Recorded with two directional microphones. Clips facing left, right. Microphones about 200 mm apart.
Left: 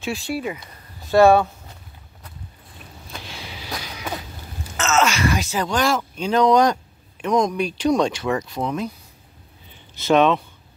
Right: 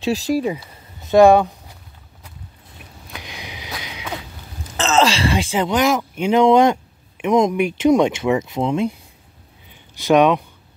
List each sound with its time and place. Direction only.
0.0 s speech: 40° right (ahead or behind)
1.1 s speech: 15° right (ahead or behind)
3.2 s sniff: 15° right (ahead or behind)
4.7 s speech: 30° right (ahead or behind)
9.9 s speech: 15° right (ahead or behind)